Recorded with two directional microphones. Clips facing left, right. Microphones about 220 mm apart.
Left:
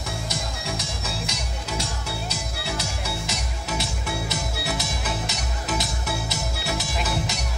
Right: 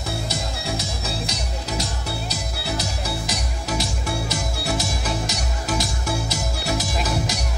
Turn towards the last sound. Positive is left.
turn(degrees=-40)  # may be behind; listen again after turning